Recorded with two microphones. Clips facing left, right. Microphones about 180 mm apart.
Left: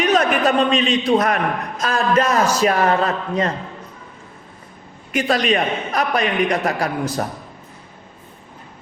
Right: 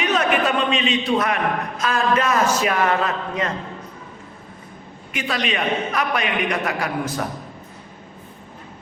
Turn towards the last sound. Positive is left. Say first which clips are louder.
# left 3 dB
turn(degrees=35)  # may be behind; listen again after turning